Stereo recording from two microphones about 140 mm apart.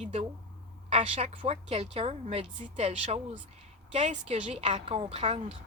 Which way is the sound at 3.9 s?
55° right (ahead or behind).